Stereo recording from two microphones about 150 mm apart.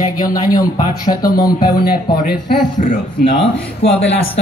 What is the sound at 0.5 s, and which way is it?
Speech, 25° left (ahead or behind).